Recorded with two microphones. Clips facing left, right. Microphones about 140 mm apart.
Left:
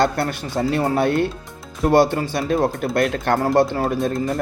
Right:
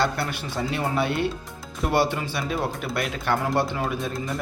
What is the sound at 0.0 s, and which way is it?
Speech, 45° left (ahead or behind).